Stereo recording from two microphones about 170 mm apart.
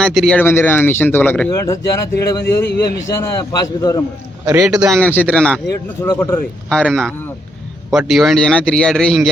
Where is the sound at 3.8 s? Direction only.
20° left (ahead or behind).